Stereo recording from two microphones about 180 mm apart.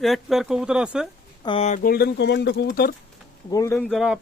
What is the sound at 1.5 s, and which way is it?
Speech, 35° left (ahead or behind).